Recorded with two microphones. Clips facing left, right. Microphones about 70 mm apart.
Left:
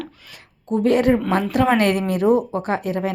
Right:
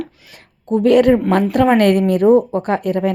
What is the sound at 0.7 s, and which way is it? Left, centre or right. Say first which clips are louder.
Speech: right 5 dB; right.